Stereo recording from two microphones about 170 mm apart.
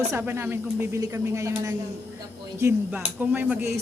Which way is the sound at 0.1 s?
15° right (ahead or behind).